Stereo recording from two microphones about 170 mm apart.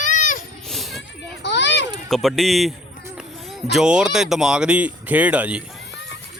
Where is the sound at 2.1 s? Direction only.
Centre (ahead or behind).